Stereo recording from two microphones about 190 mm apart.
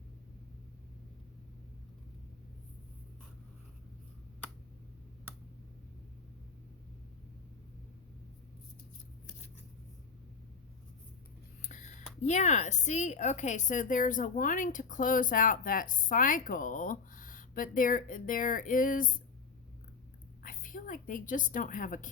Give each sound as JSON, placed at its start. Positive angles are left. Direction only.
{"t": 11.6, "sound": "a sound", "side_deg": 40}
{"t": 12.2, "sound": "a woman's voice", "side_deg": 40}
{"t": 20.4, "sound": "a woman's voice", "side_deg": 45}